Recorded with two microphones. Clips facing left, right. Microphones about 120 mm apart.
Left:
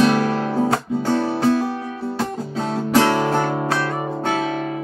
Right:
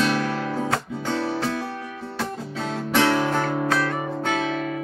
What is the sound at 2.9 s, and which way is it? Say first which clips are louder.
Music: left 3 dB; 35° left (ahead or behind).